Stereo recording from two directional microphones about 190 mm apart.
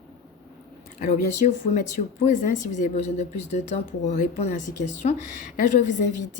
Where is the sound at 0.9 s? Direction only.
40° left (ahead or behind).